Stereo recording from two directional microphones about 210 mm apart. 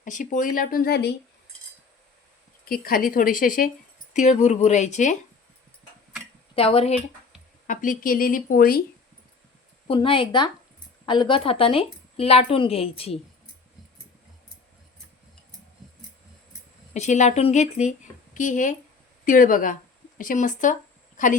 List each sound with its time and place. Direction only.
0.0 s speech: 35° left (ahead or behind)
2.6 s speech: 45° left (ahead or behind)
6.6 s a woman's voice: 25° left (ahead or behind)
7.7 s speech: 40° left (ahead or behind)
9.8 s a woman's voice: 25° left (ahead or behind)
16.9 s a woman's voice: 35° left (ahead or behind)